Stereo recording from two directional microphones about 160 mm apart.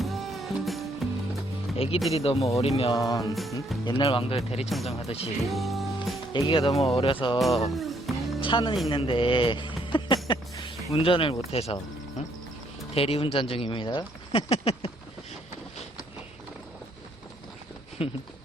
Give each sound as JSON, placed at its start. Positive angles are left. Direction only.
{"t": 0.0, "sound": "music", "side_deg": 0}
{"t": 1.7, "sound": "music", "side_deg": 35}
{"t": 2.1, "sound": "speech", "side_deg": 40}
{"t": 2.9, "sound": "music", "side_deg": 20}
{"t": 3.8, "sound": "speech", "side_deg": 30}
{"t": 5.5, "sound": "music", "side_deg": 0}
{"t": 6.3, "sound": "speech", "side_deg": 35}
{"t": 7.3, "sound": "speech", "side_deg": 0}
{"t": 7.7, "sound": "music", "side_deg": 0}
{"t": 8.4, "sound": "speech", "side_deg": 30}
{"t": 18.0, "sound": "speech", "side_deg": 35}